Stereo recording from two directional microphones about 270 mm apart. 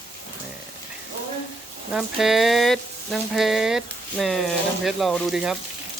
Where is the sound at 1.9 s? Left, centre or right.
Centre.